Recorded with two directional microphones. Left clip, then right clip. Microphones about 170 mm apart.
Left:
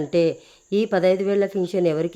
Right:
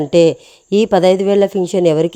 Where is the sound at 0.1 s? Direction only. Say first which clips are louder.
Right 10 dB; 35° right (ahead or behind).